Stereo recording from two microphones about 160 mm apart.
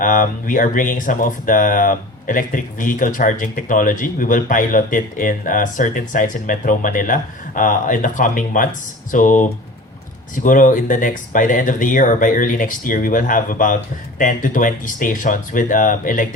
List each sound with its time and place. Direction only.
0.0 s speech: 55° left (ahead or behind)